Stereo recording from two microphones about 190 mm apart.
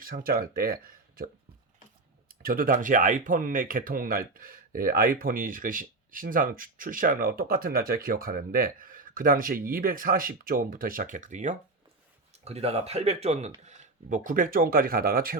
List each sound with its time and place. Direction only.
0.0 s speech: 50° right (ahead or behind)
2.4 s speech: 50° right (ahead or behind)